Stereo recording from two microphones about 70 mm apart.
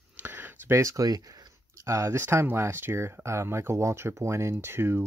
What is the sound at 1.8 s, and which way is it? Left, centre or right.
Speech, right.